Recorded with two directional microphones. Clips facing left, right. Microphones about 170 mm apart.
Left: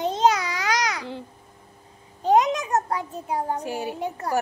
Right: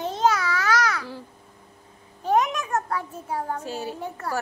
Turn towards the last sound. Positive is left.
turn(degrees=20)  # may be behind; listen again after turning